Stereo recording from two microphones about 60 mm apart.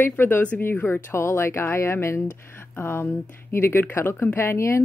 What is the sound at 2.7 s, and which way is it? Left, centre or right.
Speech, left.